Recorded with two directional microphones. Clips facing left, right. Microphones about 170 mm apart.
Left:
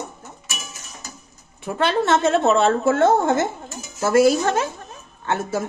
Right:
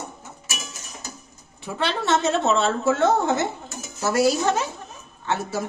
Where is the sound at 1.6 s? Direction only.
50° left (ahead or behind).